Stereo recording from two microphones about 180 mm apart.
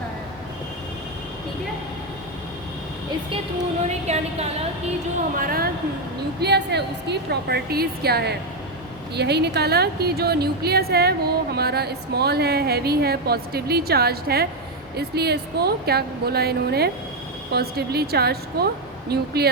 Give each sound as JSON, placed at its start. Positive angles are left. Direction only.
{"t": 3.8, "sound": "a woman's voice", "side_deg": -40}
{"t": 5.4, "sound": "speech", "side_deg": -55}
{"t": 6.4, "sound": "speech", "side_deg": -70}